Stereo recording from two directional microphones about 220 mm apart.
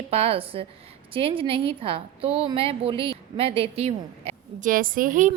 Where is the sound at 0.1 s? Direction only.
25° right (ahead or behind).